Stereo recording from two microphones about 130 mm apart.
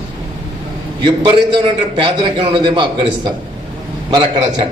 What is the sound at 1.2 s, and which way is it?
A man's voice, 40° right (ahead or behind).